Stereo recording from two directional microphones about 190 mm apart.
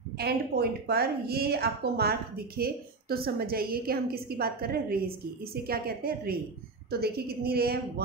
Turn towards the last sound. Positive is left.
turn(degrees=-55)  # may be behind; listen again after turning